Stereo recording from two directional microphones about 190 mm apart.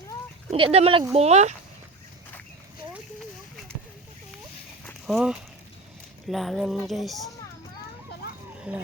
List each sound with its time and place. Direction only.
0.5 s speech: 30° right (ahead or behind)
5.0 s speech: 5° right (ahead or behind)
8.5 s a sound: 5° right (ahead or behind)